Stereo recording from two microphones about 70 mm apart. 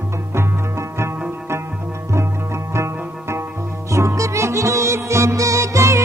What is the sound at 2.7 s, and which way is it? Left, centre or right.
Music, right.